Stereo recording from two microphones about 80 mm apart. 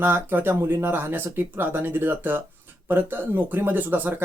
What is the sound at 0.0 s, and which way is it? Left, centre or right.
Speech, right.